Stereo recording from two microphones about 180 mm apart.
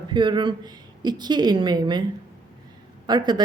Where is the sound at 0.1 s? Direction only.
25° right (ahead or behind).